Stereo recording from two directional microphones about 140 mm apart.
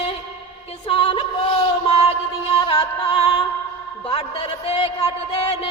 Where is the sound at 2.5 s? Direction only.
40° left (ahead or behind).